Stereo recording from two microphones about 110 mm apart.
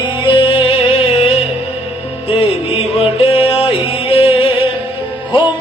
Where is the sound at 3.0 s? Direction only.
65° left (ahead or behind).